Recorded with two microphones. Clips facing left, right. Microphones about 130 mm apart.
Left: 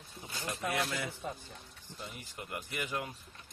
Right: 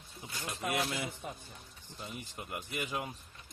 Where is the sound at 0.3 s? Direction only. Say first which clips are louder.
Even; 25° left (ahead or behind).